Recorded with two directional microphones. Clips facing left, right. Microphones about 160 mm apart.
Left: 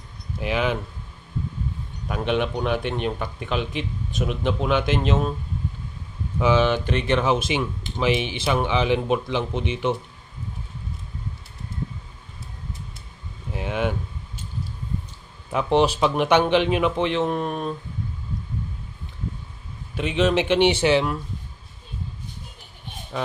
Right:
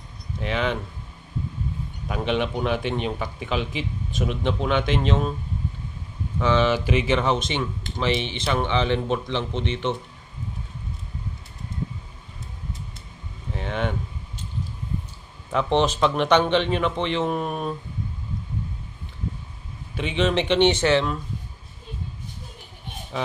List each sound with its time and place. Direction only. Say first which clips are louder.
0.4 s a man's voice: left 2 dB; 5° left (ahead or behind)
2.0 s a man's voice: left 1 dB; centre (ahead or behind)
6.4 s speech: left 1 dB; 5° left (ahead or behind)
13.5 s a sound: left 2 dB; 5° left (ahead or behind)
15.5 s speech: left 2 dB; 10° left (ahead or behind)
20.0 s speech: left 2 dB; centre (ahead or behind)
23.1 s speech: even; centre (ahead or behind)